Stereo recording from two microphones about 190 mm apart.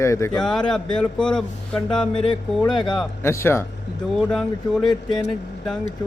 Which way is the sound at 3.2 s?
15° left (ahead or behind).